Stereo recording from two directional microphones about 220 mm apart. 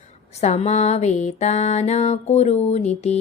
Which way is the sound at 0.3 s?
30° left (ahead or behind).